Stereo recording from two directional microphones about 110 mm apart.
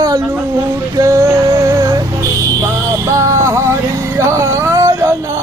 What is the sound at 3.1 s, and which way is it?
Music, 30° right (ahead or behind).